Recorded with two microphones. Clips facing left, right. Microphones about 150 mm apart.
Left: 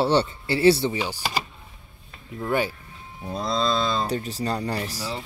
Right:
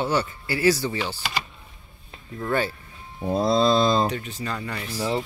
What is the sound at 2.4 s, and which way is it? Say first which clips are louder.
Speech: even; 15° left (ahead or behind).